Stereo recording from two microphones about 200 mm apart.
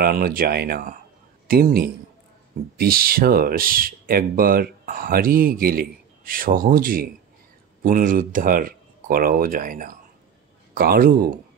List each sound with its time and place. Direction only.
0.0 s speech: 45° right (ahead or behind)